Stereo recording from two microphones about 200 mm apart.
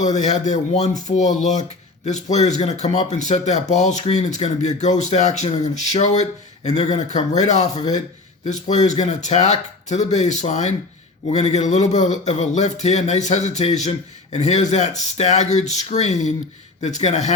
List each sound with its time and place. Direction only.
0.0 s speech: 35° left (ahead or behind)